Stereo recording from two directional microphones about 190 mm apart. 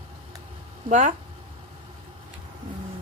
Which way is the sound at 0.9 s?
40° right (ahead or behind).